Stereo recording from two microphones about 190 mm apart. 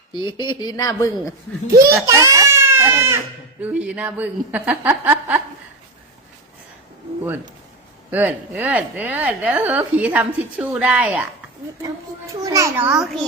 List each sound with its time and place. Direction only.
0.1 s speech: 25° left (ahead or behind)
2.0 s baby cry: 15° right (ahead or behind)
3.6 s a woman's voice: 5° right (ahead or behind)
8.1 s a woman's voice: 10° right (ahead or behind)
12.4 s a woman's voice: 15° right (ahead or behind)